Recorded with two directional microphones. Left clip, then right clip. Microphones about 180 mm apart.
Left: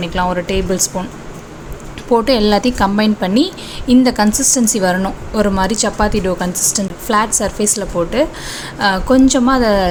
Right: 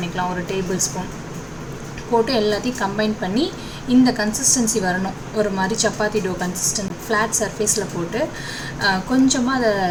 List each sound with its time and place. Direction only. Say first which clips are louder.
0.2 s a woman's voice: left 7 dB; 45° left (ahead or behind)
2.2 s a woman's voice: left 7 dB; 50° left (ahead or behind)